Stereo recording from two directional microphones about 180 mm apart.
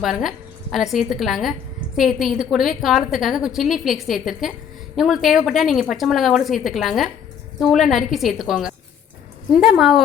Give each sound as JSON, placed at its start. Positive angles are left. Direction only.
{"t": 0.0, "sound": "a woman's voice", "side_deg": 0}